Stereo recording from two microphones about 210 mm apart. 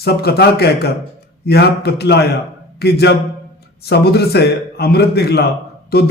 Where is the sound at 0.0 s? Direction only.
50° left (ahead or behind).